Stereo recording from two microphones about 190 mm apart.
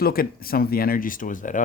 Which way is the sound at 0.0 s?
50° left (ahead or behind).